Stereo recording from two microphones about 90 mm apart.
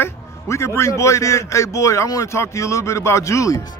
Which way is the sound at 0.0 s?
30° left (ahead or behind).